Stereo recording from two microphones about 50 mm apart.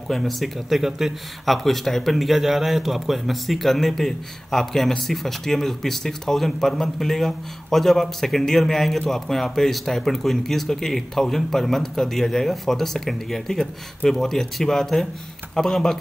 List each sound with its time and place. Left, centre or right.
0.1 s speech: centre